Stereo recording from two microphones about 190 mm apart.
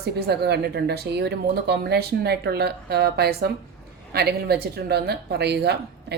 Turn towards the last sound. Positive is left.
turn(degrees=-60)  # may be behind; listen again after turning